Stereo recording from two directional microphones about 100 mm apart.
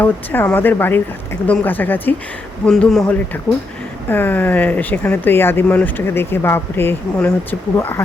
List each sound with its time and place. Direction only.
0.0 s speech: 15° left (ahead or behind)
2.6 s speech: 10° left (ahead or behind)
4.1 s speech: 20° left (ahead or behind)